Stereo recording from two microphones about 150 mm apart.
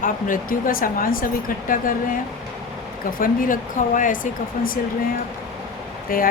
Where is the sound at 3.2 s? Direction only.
65° left (ahead or behind).